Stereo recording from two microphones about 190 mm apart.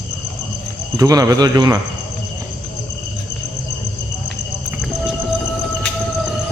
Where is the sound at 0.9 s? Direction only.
20° right (ahead or behind).